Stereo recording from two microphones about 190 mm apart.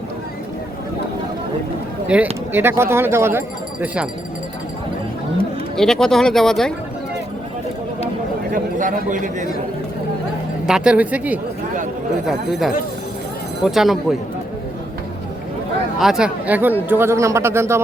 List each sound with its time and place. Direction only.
2.1 s speech: 5° right (ahead or behind)
5.7 s speech: centre (ahead or behind)
8.5 s a man's voice: 45° right (ahead or behind)
10.7 s speech: 5° right (ahead or behind)
16.0 s speech: centre (ahead or behind)